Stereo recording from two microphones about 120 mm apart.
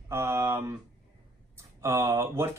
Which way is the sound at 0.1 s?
20° right (ahead or behind).